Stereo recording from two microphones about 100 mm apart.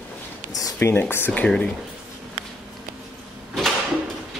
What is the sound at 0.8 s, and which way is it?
Speech, 25° left (ahead or behind).